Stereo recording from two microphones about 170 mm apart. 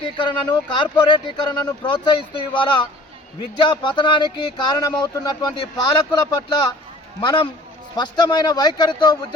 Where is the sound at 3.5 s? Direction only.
30° left (ahead or behind).